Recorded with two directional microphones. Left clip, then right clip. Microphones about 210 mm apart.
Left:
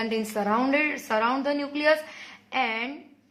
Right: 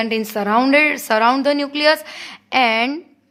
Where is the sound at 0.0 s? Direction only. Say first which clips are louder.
Right 7 dB; 40° right (ahead or behind).